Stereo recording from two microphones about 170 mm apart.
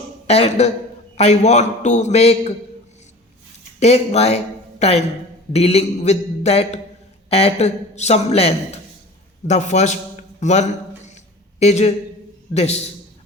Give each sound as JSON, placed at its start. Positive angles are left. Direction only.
{"t": 0.3, "sound": "a man's voice", "side_deg": 40}
{"t": 3.8, "sound": "a man's voice", "side_deg": 40}